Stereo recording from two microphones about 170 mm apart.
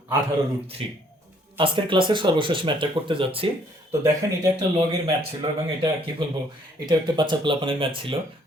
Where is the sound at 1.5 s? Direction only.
30° right (ahead or behind).